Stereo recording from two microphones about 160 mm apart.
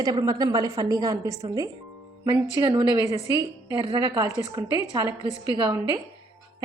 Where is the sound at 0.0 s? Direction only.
25° right (ahead or behind).